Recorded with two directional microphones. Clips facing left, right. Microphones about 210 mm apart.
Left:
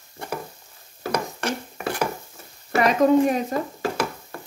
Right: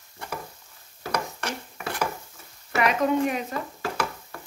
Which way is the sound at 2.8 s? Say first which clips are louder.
Left 5 dB; 35° left (ahead or behind).